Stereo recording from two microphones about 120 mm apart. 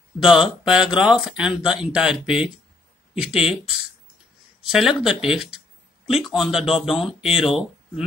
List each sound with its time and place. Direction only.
0.2 s speech: 5° right (ahead or behind)